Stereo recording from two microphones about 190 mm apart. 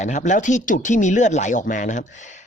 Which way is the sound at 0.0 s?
40° left (ahead or behind).